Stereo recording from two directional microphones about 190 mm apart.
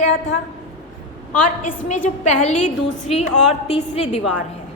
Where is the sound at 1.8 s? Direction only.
40° left (ahead or behind).